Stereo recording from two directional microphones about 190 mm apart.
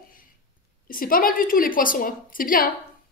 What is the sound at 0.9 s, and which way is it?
A woman's voice, 50° left (ahead or behind).